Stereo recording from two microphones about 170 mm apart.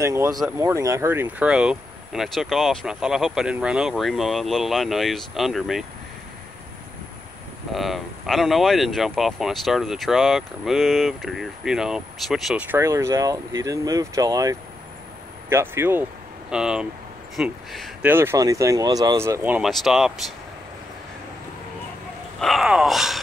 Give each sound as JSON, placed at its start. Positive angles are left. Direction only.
{"t": 0.0, "sound": "speech", "side_deg": -15}
{"t": 7.7, "sound": "speech", "side_deg": 0}
{"t": 18.0, "sound": "speech", "side_deg": -15}
{"t": 22.4, "sound": "speech", "side_deg": 0}